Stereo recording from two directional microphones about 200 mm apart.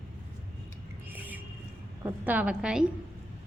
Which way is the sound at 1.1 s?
10° right (ahead or behind).